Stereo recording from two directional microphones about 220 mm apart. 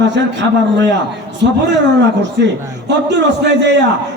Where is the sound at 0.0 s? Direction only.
55° right (ahead or behind).